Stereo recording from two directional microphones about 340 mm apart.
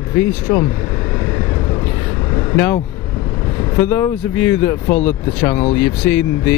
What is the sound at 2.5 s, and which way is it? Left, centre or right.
Speech, centre.